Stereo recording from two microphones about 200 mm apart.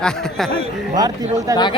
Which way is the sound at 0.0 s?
Centre (ahead or behind).